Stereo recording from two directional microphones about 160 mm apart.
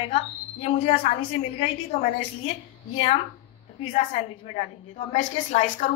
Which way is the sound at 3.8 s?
45° left (ahead or behind).